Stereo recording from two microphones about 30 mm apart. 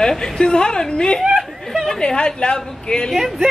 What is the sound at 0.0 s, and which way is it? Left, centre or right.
A woman's voice, centre.